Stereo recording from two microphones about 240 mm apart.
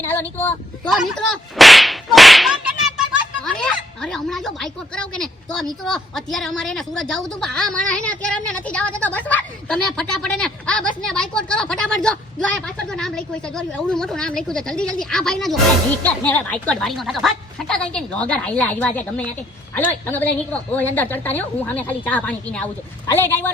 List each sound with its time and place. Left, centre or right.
0.1 s whip: centre
16.0 s a woman's voice: centre